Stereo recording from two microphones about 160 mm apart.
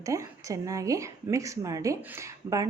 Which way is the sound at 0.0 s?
20° right (ahead or behind).